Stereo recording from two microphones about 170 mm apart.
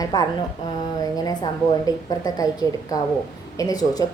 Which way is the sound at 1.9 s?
20° left (ahead or behind).